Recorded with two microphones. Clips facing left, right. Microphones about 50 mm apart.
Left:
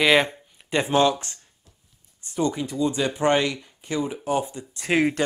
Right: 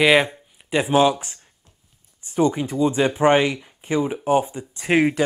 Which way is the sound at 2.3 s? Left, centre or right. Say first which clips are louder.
Right 5 dB; centre.